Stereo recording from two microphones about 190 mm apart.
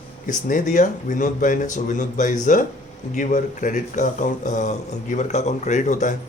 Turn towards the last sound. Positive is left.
turn(degrees=40)  # may be behind; listen again after turning